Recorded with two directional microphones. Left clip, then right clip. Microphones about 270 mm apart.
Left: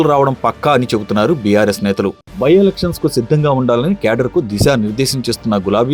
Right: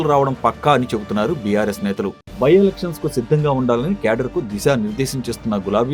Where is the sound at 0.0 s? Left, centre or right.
Left.